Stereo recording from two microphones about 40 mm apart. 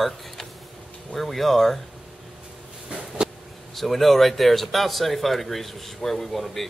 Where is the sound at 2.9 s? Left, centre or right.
Right.